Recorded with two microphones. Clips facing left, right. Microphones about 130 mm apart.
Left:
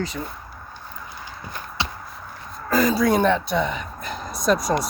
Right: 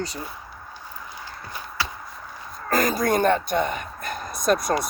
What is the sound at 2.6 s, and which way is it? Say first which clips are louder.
Speech: left 3 dB; 50° right (ahead or behind).